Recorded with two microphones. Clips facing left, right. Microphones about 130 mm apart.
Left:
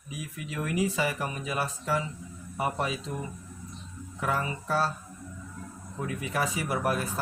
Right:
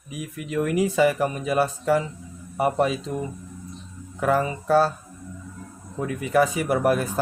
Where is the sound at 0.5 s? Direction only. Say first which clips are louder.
Right 7 dB; 90° right.